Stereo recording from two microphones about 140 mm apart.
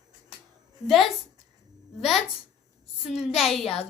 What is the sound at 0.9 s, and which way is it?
Speech, centre (ahead or behind).